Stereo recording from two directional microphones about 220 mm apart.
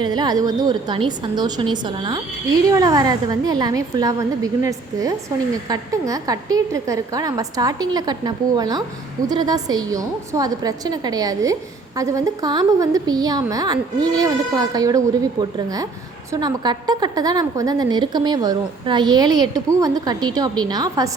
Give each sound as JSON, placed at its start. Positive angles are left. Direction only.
{"t": 0.0, "sound": "a woman's voice", "side_deg": -20}